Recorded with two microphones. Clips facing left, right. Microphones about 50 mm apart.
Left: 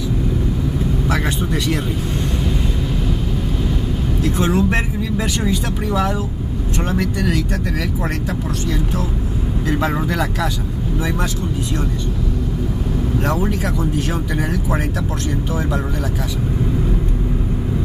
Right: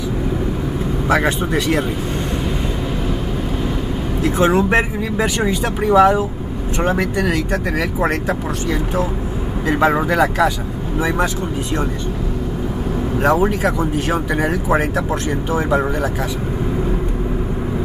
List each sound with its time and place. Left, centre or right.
1.0 s speech: centre
4.2 s speech: right
9.7 s speech: right
13.2 s speech: centre